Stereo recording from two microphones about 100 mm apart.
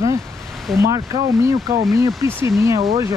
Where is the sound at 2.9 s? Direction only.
40° right (ahead or behind).